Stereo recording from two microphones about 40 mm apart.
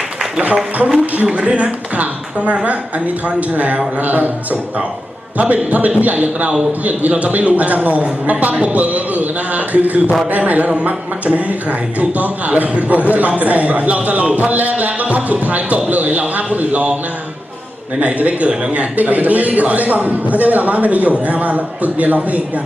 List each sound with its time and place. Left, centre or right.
0.3 s speech: right
5.4 s speech: right
18.0 s speech: right